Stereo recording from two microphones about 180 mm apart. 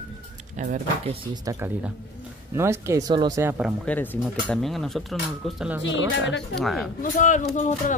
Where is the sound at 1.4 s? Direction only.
15° right (ahead or behind).